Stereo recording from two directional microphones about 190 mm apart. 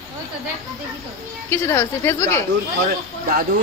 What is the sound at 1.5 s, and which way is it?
Speech, 15° left (ahead or behind).